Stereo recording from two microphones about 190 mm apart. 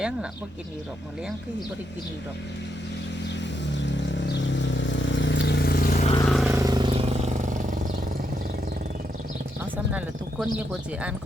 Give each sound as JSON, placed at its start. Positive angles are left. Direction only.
{"t": 3.8, "sound": "vehicle", "side_deg": 70}
{"t": 6.2, "sound": "vehicle", "side_deg": 0}
{"t": 6.5, "sound": "vehicle", "side_deg": -20}
{"t": 10.4, "sound": "speech", "side_deg": -5}